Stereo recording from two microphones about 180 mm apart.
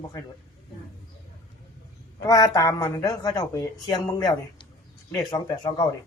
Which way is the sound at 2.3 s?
20° left (ahead or behind).